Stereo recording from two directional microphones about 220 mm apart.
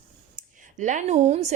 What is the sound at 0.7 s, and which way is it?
Speech, 35° right (ahead or behind).